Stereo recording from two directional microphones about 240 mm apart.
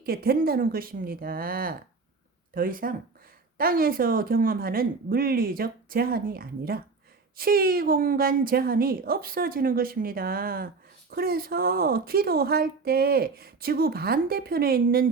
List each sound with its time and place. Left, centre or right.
0.0 s speech: right